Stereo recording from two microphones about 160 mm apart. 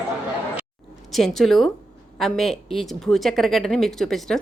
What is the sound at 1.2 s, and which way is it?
A woman's voice, centre (ahead or behind).